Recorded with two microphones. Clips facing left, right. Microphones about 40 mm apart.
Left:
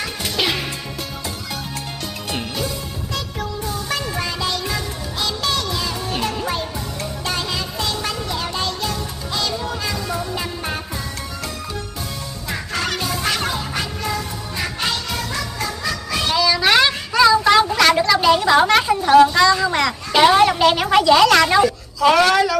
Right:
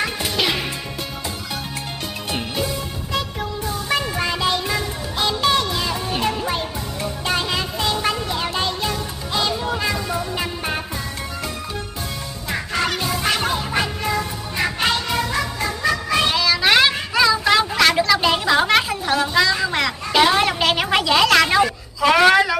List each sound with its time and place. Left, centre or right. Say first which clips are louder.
0.4 s music: even; centre
2.5 s music: right 1 dB; centre
12.4 s music: right 2 dB; centre
13.7 s music: right 3 dB; centre
19.2 s a sound: left 4 dB; centre
22.1 s speech: right 3 dB; centre